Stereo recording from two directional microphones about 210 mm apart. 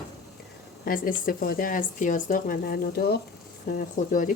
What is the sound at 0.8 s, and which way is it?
Speech, 40° left (ahead or behind).